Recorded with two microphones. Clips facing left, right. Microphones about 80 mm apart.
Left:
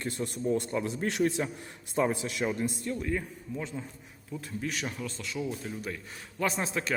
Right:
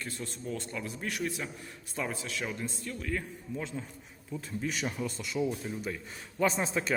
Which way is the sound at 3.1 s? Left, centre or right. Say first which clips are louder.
Left 2 dB; centre.